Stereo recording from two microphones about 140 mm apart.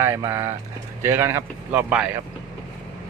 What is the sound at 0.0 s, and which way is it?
Speech, 20° right (ahead or behind).